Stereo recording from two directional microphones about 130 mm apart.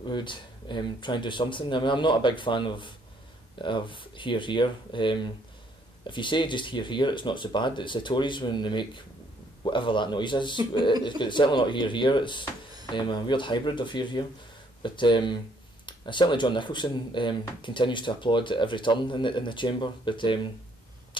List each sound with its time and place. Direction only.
0.0 s speech: 35° left (ahead or behind)